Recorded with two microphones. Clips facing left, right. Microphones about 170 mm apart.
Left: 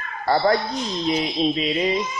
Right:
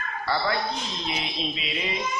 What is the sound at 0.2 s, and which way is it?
A man's voice, 45° left (ahead or behind).